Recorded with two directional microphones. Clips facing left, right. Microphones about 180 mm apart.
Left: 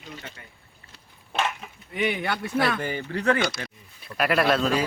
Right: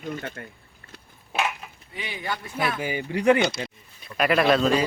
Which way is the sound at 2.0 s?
65° left (ahead or behind).